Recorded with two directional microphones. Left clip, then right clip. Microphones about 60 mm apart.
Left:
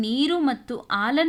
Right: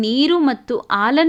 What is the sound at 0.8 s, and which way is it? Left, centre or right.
Speech, right.